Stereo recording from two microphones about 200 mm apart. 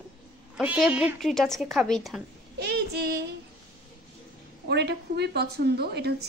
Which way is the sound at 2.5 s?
55° right (ahead or behind).